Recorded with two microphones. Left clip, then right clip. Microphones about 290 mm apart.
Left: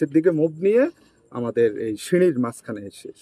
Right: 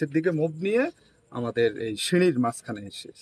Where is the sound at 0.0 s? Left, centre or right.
Centre.